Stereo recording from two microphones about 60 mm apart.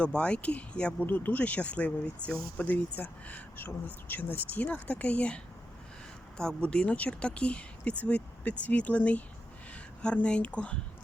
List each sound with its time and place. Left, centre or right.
0.0 s speech: centre
1.0 s speech: left
6.6 s speech: left